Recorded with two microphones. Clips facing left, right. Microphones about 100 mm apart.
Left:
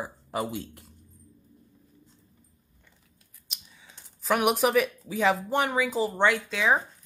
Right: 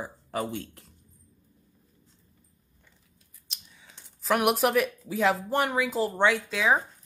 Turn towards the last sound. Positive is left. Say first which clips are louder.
# even
turn(degrees=0)  # may be behind; listen again after turning